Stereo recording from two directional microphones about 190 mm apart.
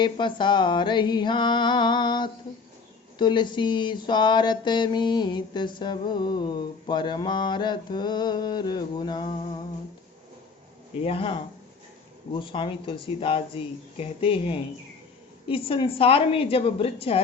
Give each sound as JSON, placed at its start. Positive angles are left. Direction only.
{"t": 0.0, "sound": "mantra", "side_deg": 25}
{"t": 11.0, "sound": "mantra", "side_deg": 30}